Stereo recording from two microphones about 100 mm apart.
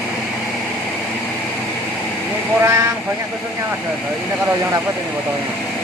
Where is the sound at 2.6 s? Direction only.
25° right (ahead or behind).